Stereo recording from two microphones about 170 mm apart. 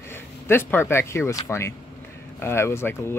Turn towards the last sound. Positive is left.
turn(degrees=15)  # may be behind; listen again after turning